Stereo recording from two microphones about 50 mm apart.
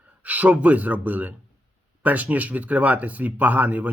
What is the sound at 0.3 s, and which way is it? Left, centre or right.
Speech, right.